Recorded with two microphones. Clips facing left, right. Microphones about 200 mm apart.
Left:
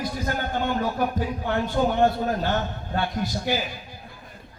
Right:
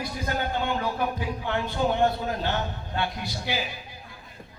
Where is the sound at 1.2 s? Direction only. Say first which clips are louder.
Left 3 dB; 45° left (ahead or behind).